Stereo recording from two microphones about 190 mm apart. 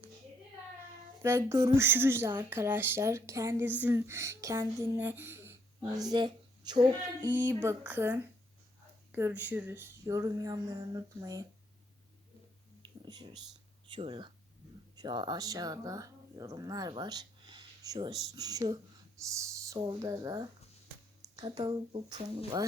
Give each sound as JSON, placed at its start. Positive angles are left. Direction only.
{"t": 1.2, "sound": "speech", "side_deg": -15}
{"t": 12.8, "sound": "a sound", "side_deg": -20}
{"t": 13.8, "sound": "speech", "side_deg": -25}